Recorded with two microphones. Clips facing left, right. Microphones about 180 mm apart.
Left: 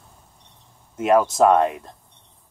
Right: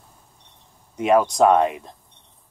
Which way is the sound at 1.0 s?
Centre (ahead or behind).